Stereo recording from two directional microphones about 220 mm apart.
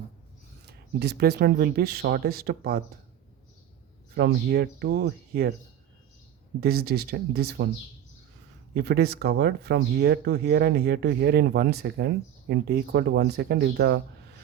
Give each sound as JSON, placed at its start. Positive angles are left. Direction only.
{"t": 0.6, "sound": "speech", "side_deg": -50}
{"t": 4.1, "sound": "speech", "side_deg": -45}
{"t": 6.6, "sound": "speech", "side_deg": -45}
{"t": 8.7, "sound": "speech", "side_deg": -45}